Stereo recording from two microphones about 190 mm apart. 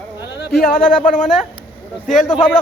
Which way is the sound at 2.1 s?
40° left (ahead or behind).